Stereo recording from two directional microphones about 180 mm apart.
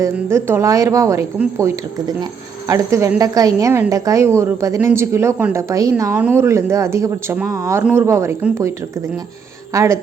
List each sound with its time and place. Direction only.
0.0 s speech: 15° right (ahead or behind)
9.7 s speech: 15° right (ahead or behind)